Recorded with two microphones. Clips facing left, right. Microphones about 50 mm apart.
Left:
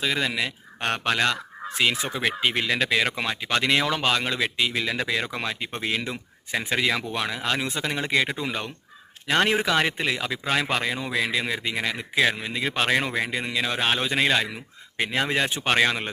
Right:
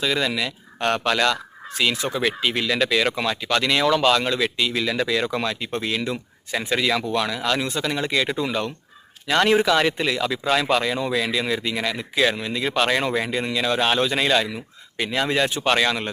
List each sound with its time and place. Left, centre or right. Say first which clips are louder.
0.0 s a man's voice: right 2 dB; centre
13.0 s a man's voice: right 3 dB; centre; by 16.0 s left